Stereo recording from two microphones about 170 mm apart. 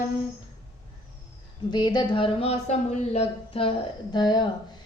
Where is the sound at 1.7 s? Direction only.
25° left (ahead or behind).